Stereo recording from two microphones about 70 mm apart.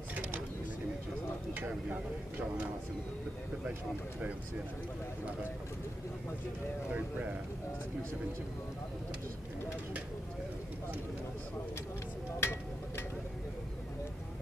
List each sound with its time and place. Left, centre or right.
1.5 s speech: right
6.9 s speech: right
12.4 s a sound: left